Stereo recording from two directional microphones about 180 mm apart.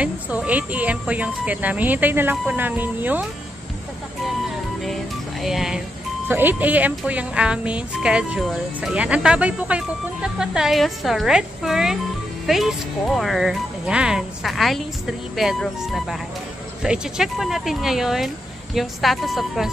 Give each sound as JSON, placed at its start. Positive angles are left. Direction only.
{"t": 0.0, "sound": "speech", "side_deg": -10}
{"t": 5.4, "sound": "speech", "side_deg": 0}